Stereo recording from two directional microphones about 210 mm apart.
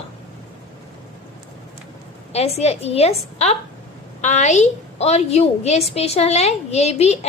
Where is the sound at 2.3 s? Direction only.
30° left (ahead or behind).